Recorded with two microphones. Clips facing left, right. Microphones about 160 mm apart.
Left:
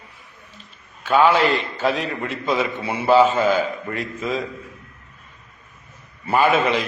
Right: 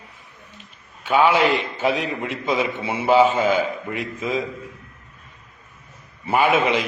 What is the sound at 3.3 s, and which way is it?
A man's voice, 5° right (ahead or behind).